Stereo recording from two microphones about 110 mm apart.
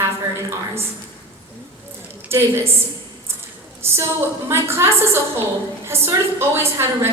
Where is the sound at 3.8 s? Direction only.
20° right (ahead or behind).